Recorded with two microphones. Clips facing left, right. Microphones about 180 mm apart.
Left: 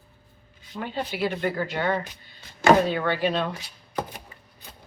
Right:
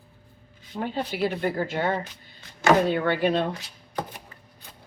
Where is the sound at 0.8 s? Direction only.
45° right (ahead or behind).